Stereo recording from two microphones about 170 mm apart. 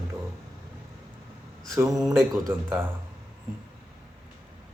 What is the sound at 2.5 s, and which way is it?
Speech, 10° right (ahead or behind).